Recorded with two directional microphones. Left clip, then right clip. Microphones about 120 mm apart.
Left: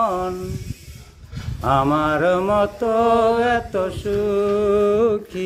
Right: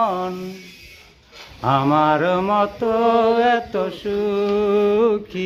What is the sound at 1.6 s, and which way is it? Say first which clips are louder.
Mantra: right 1 dB; 5° right (ahead or behind).